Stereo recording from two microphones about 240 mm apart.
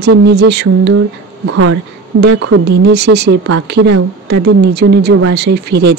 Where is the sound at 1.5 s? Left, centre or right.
Right.